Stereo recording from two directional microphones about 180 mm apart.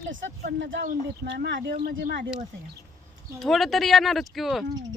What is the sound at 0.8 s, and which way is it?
Speech, 60° right (ahead or behind).